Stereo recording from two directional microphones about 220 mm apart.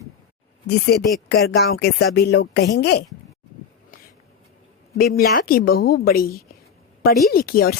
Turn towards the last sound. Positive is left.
turn(degrees=40)  # may be behind; listen again after turning